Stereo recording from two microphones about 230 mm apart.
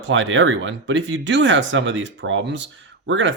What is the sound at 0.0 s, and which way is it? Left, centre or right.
Speech, right.